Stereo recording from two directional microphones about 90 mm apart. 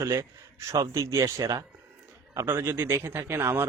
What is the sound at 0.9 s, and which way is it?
A man's voice, 40° right (ahead or behind).